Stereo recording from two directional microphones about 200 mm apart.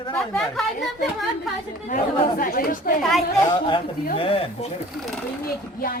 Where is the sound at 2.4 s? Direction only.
45° left (ahead or behind).